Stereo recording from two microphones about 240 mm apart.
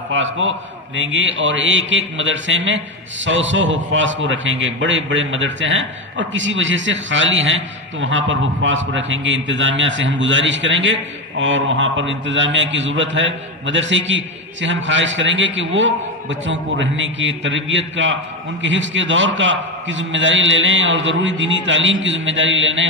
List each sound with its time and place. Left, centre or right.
0.1 s a man's voice: right